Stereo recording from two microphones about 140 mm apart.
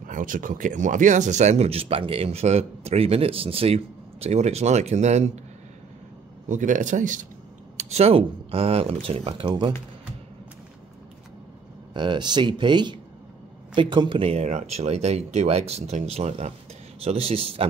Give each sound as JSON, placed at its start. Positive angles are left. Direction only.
{"t": 0.0, "sound": "a man's voice", "side_deg": -75}
{"t": 6.5, "sound": "speech", "side_deg": -65}
{"t": 7.7, "sound": "a man's voice", "side_deg": -50}
{"t": 11.9, "sound": "a man's voice", "side_deg": -35}